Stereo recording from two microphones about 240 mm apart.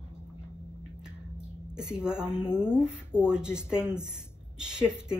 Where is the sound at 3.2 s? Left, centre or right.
Centre.